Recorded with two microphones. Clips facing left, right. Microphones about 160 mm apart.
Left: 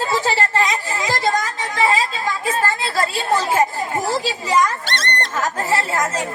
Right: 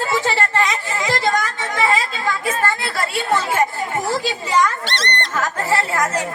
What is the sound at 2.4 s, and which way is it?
A woman's voice, 30° left (ahead or behind).